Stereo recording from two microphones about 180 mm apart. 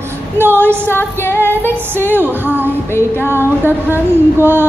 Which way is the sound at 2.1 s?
10° right (ahead or behind).